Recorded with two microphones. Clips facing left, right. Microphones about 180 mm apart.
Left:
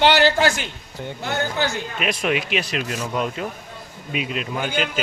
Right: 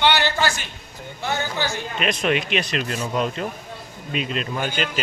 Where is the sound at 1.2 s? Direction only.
55° left (ahead or behind).